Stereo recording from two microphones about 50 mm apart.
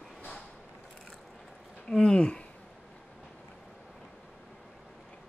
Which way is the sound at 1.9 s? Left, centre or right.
Centre.